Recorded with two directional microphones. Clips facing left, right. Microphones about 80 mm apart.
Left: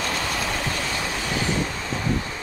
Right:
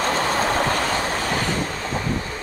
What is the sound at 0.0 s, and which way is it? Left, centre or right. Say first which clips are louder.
Train: right 6 dB; right.